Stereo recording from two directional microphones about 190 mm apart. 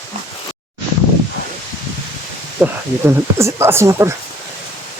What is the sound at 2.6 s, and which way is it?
Speech, 15° right (ahead or behind).